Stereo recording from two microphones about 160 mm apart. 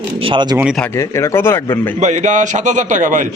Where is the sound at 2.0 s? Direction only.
50° right (ahead or behind).